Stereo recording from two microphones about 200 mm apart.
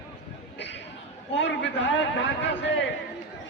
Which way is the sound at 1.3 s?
65° left (ahead or behind).